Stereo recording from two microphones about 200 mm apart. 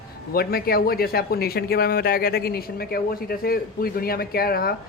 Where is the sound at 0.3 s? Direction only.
50° left (ahead or behind).